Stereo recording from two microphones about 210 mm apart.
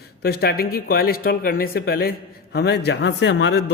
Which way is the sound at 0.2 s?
50° left (ahead or behind).